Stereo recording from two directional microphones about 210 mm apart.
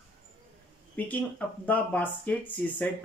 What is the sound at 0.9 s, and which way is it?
Speech, 5° left (ahead or behind).